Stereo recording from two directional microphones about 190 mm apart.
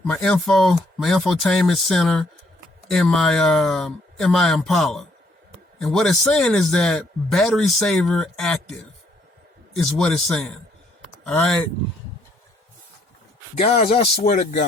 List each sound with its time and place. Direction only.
0.0 s speech: 5° left (ahead or behind)
9.7 s speech: 5° left (ahead or behind)
13.6 s speech: 45° left (ahead or behind)